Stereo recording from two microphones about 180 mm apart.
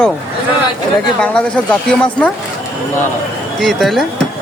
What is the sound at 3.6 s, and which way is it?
Speech, centre (ahead or behind).